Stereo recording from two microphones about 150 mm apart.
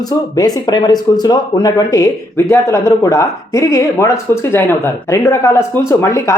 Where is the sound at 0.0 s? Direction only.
25° left (ahead or behind).